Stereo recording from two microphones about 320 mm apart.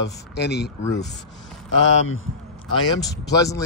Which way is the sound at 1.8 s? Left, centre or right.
Left.